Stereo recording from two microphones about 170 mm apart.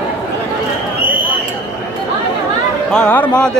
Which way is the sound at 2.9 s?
10° left (ahead or behind).